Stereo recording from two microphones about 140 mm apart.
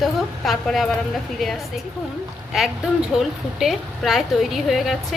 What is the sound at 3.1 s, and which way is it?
A woman's voice, centre (ahead or behind).